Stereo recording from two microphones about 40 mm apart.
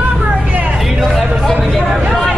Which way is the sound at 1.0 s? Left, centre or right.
Centre.